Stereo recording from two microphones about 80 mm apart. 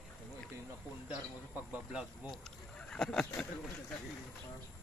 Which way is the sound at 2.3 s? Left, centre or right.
Centre.